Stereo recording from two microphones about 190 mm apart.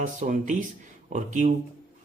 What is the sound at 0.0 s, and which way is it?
Speech, 40° right (ahead or behind).